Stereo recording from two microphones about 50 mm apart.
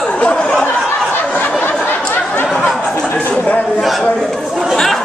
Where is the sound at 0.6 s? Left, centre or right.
Left.